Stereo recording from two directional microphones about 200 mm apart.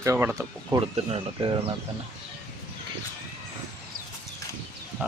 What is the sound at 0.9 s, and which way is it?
Speech, 25° right (ahead or behind).